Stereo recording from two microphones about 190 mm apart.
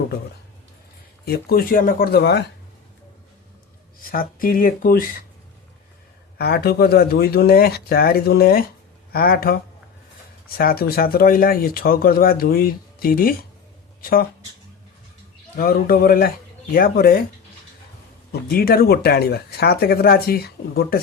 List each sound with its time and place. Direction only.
1.2 s speech: 55° left (ahead or behind)
4.0 s speech: 50° left (ahead or behind)
6.4 s speech: 55° left (ahead or behind)
10.6 s speech: 50° left (ahead or behind)
15.5 s speech: 50° left (ahead or behind)
18.3 s speech: 55° left (ahead or behind)